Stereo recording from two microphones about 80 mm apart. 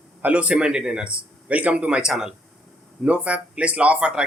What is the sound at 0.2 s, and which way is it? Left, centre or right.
Speech, centre.